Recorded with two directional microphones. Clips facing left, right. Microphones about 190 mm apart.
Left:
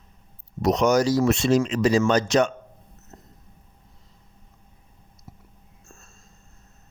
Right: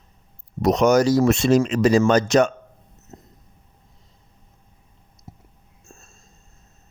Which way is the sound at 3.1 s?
15° right (ahead or behind).